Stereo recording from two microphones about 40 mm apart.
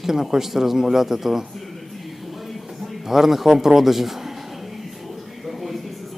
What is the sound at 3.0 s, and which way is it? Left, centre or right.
Speech, centre.